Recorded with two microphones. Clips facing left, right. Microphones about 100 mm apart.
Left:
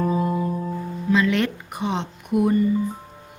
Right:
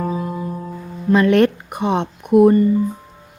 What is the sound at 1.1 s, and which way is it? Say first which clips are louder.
Speech: right 7 dB; 55° right (ahead or behind).